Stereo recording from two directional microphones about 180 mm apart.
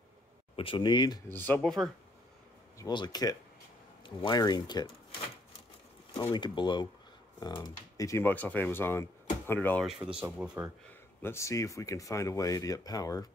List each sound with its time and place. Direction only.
0.6 s speech: 30° left (ahead or behind)
1.3 s speech: 10° left (ahead or behind)
2.8 s speech: 25° left (ahead or behind)
6.3 s speech: 25° left (ahead or behind)
9.8 s speech: 5° right (ahead or behind)
11.2 s speech: 15° left (ahead or behind)